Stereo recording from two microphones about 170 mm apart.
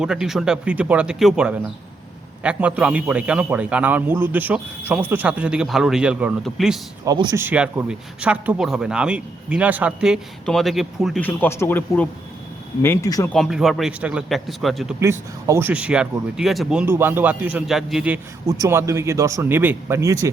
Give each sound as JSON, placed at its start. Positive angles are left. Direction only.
{"t": 0.0, "sound": "a man's voice", "side_deg": -5}
{"t": 7.0, "sound": "speech", "side_deg": -20}
{"t": 7.4, "sound": "speech", "side_deg": -10}
{"t": 11.2, "sound": "speech", "side_deg": 10}
{"t": 13.3, "sound": "speech", "side_deg": 0}
{"t": 15.0, "sound": "a man's voice", "side_deg": -15}
{"t": 18.4, "sound": "a man's voice", "side_deg": -20}